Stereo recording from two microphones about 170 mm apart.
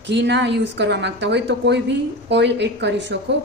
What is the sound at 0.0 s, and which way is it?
A woman's voice, 90° right.